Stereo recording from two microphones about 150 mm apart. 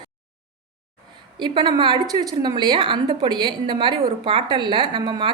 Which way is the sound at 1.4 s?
30° right (ahead or behind).